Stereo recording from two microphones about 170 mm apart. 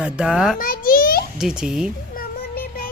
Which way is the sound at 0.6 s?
55° left (ahead or behind).